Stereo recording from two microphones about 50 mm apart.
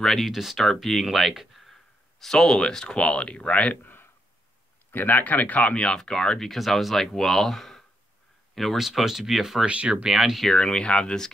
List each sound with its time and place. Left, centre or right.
0.0 s speech: centre; by 3.7 s left
3.8 s a sound: left
4.9 s speech: left; by 9.7 s centre
9.7 s speech: right
10.0 s speech: centre
10.5 s speech: centre